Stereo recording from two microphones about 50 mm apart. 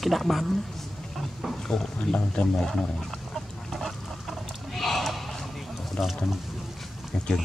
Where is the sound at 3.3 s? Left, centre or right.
Centre.